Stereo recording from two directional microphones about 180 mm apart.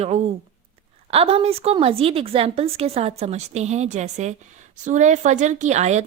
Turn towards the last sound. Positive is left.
turn(degrees=-40)  # may be behind; listen again after turning